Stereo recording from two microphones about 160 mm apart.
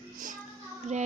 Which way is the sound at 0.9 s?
45° right (ahead or behind).